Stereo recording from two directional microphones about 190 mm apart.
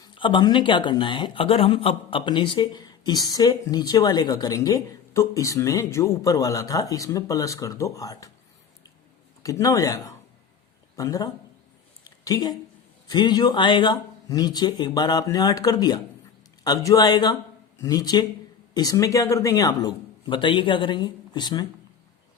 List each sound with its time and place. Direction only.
0.0 s speech: 25° left (ahead or behind)
9.4 s speech: 15° left (ahead or behind)
12.0 s a sound: 20° left (ahead or behind)
13.1 s speech: 20° left (ahead or behind)